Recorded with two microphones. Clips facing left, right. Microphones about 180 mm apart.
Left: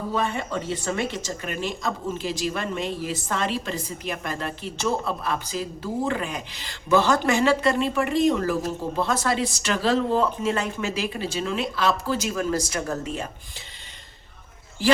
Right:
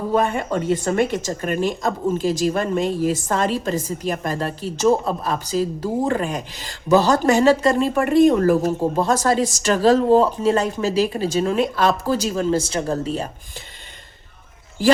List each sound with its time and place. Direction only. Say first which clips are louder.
0.1 s speech: right 7 dB; 50° right (ahead or behind); by 13.2 s 30° right (ahead or behind)